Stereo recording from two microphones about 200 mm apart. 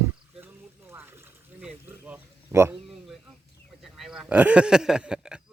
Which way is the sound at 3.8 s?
Centre (ahead or behind).